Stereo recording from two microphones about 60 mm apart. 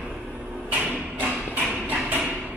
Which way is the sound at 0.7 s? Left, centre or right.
Right.